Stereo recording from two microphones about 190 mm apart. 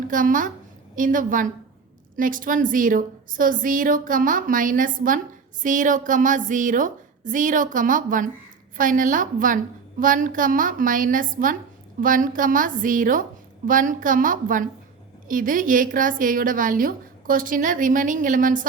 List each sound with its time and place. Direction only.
0.1 s a woman's voice: 45° right (ahead or behind)